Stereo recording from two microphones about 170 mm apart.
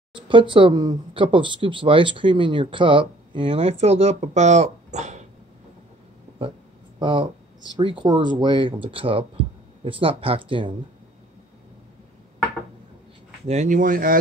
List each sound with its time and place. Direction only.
0.1 s speech: 30° right (ahead or behind)
7.0 s speech: 30° right (ahead or behind)
13.5 s speech: 45° right (ahead or behind)